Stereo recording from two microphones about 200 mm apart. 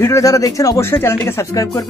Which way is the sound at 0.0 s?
15° left (ahead or behind).